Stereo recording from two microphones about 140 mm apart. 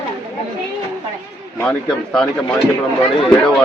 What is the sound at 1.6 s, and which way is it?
Speech, 5° left (ahead or behind).